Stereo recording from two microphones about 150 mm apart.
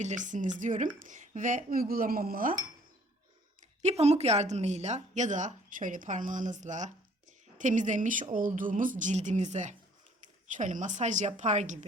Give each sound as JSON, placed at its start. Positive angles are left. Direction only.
{"t": 0.0, "sound": "a woman's voice", "side_deg": -55}
{"t": 3.8, "sound": "a woman's voice", "side_deg": -45}